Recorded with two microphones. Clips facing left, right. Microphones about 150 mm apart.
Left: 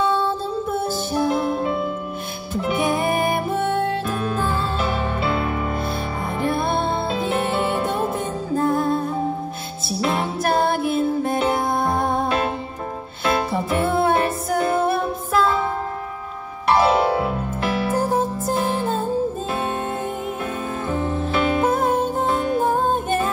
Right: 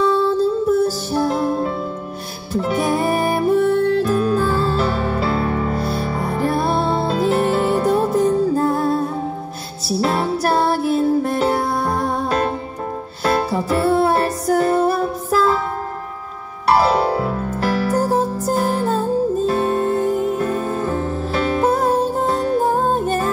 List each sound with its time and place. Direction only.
0.0 s music: 40° right (ahead or behind)
16.6 s music: 40° right (ahead or behind)